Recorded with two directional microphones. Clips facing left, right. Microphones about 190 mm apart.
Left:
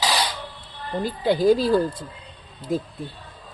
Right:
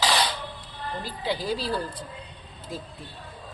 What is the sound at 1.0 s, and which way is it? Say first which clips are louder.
Speech: left 12 dB; 50° left (ahead or behind).